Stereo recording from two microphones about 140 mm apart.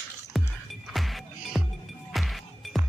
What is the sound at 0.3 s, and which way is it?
Music, centre (ahead or behind).